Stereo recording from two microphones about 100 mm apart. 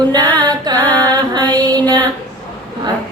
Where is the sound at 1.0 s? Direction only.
45° right (ahead or behind).